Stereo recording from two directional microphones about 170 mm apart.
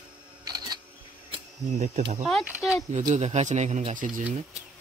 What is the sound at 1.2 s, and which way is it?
Cricket, 40° right (ahead or behind).